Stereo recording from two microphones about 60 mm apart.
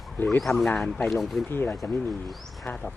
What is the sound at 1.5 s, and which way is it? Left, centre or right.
Speech, left.